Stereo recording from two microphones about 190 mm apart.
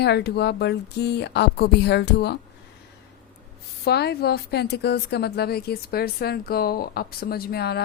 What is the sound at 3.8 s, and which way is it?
A woman's voice, 60° left (ahead or behind).